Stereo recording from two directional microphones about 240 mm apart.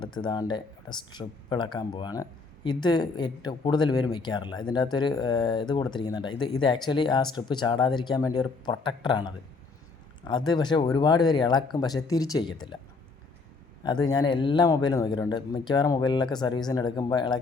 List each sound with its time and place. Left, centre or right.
0.0 s speech: centre
13.8 s speech: centre